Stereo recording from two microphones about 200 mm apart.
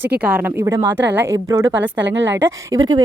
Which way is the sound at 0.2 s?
5° right (ahead or behind).